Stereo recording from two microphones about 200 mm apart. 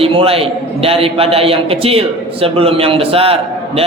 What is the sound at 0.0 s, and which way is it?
A man's voice, 30° right (ahead or behind).